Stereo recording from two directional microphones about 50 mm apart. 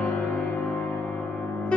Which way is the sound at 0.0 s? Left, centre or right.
Left.